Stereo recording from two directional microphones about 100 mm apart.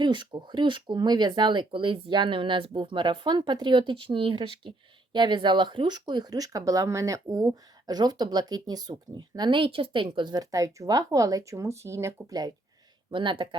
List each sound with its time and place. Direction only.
0.0 s speech: 50° right (ahead or behind)
13.1 s speech: 55° right (ahead or behind)